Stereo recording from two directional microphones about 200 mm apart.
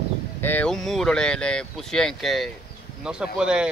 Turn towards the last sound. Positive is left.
turn(degrees=-5)  # may be behind; listen again after turning